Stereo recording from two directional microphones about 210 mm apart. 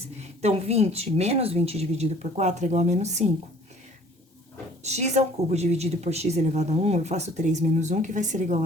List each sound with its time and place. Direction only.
0.4 s a woman's voice: 30° right (ahead or behind)
4.8 s a woman's voice: 30° right (ahead or behind)